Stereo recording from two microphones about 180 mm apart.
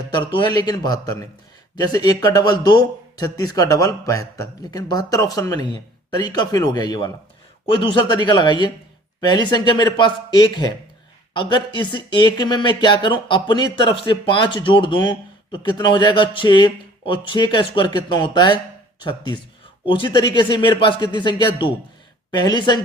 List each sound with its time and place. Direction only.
0.3 s speech: 25° left (ahead or behind)